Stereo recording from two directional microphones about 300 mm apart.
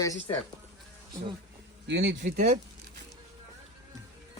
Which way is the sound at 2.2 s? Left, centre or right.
Right.